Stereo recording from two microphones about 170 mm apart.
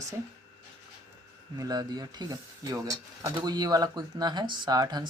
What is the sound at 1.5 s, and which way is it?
Speech, 20° right (ahead or behind).